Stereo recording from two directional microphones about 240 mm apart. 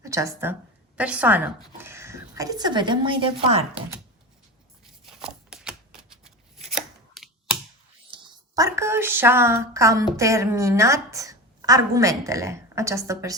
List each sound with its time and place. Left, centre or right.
0.0 s a woman's voice: centre
5.0 s shuffling cards: centre
6.7 s chopping: centre
8.1 s a sound: centre
10.2 s a woman's voice: centre